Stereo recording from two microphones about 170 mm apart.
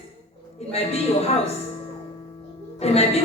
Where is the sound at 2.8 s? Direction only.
35° left (ahead or behind).